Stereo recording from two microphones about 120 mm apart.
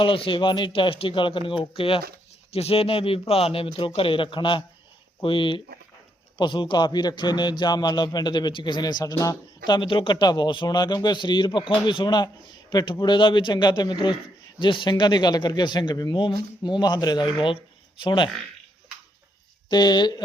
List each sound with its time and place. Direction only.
0.0 s a man's voice: 45° left (ahead or behind)
19.7 s a man's voice: 40° left (ahead or behind)